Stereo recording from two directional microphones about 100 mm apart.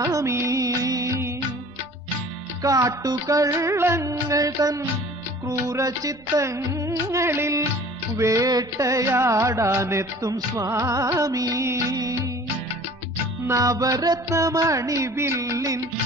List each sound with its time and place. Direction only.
0.0 s music of bollywood: 30° right (ahead or behind)
2.6 s music: 35° right (ahead or behind)
13.5 s music: 35° right (ahead or behind)